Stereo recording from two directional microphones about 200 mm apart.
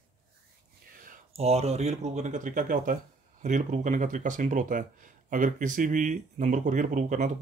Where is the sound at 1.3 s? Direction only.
30° right (ahead or behind).